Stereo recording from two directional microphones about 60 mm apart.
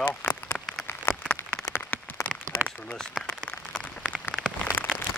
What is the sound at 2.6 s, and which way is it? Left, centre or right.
Speech, right.